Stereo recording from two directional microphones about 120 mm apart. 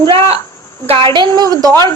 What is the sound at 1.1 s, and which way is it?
Speech, 40° right (ahead or behind).